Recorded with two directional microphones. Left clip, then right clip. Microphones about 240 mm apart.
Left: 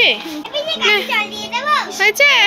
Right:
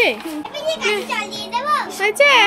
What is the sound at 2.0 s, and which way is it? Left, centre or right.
Speech, centre.